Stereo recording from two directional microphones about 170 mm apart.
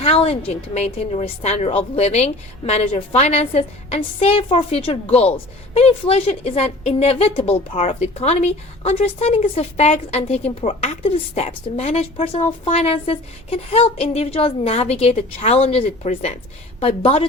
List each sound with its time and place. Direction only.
0.0 s a woman's voice: 35° left (ahead or behind)